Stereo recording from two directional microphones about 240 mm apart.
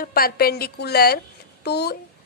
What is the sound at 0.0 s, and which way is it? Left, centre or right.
A woman's voice, left.